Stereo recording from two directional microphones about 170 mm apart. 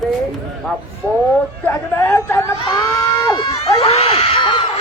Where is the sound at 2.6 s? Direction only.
20° left (ahead or behind).